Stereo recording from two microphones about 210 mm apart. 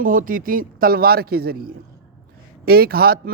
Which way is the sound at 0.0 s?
40° right (ahead or behind).